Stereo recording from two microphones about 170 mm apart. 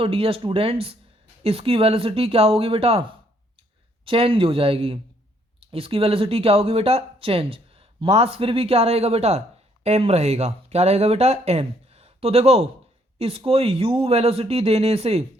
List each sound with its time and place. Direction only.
0.0 s speech: 35° right (ahead or behind)